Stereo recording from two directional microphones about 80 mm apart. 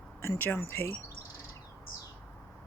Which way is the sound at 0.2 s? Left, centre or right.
Left.